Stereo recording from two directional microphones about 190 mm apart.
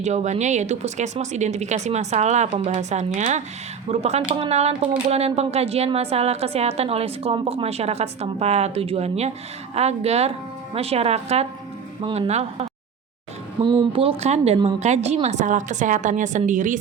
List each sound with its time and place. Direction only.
0.0 s speech: 35° right (ahead or behind)